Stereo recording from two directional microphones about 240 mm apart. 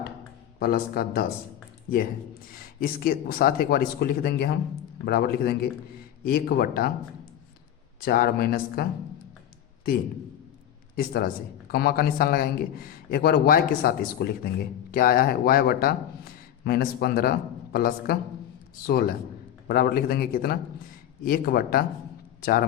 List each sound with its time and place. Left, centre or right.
0.6 s a man's voice: left
2.5 s a man's voice: left
8.0 s a man's voice: left
10.9 s a man's voice: left